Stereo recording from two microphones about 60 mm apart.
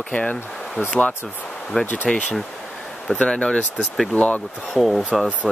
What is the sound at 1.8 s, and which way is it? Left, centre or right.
Speech, left.